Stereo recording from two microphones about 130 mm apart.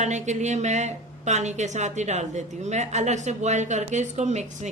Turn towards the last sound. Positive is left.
turn(degrees=-65)  # may be behind; listen again after turning